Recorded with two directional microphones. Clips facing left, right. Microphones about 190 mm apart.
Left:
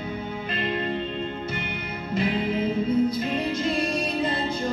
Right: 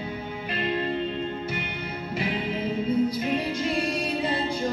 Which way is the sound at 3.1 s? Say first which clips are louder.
Left 1 dB; 10° right (ahead or behind).